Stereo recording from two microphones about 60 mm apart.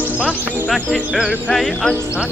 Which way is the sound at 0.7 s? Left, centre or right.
Centre.